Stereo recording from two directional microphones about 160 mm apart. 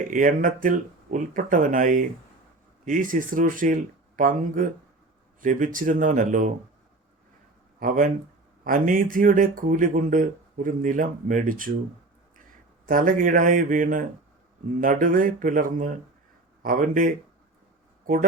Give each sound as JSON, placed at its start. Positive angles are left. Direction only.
{"t": 0.1, "sound": "speech", "side_deg": -55}
{"t": 7.8, "sound": "speech", "side_deg": -60}
{"t": 12.9, "sound": "speech", "side_deg": -55}